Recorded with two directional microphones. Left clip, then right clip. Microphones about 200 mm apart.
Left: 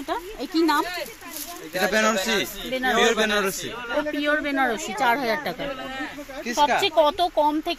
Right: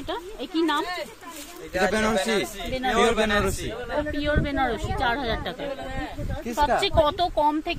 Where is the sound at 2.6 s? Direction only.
30° left (ahead or behind).